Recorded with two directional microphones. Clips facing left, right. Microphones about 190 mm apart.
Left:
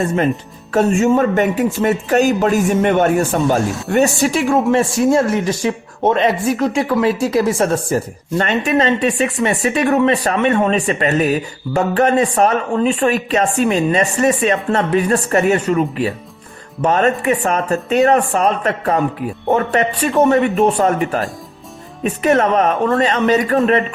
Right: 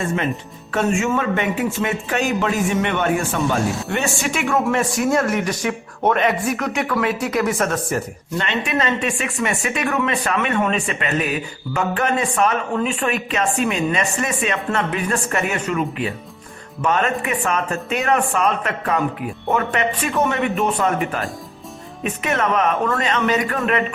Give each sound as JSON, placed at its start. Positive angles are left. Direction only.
{"t": 0.7, "sound": "speech", "side_deg": 40}
{"t": 8.4, "sound": "speech", "side_deg": 45}